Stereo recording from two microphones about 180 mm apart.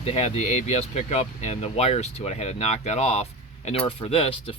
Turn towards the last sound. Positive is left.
turn(degrees=30)  # may be behind; listen again after turning